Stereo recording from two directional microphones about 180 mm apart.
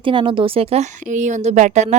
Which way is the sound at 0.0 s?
30° right (ahead or behind).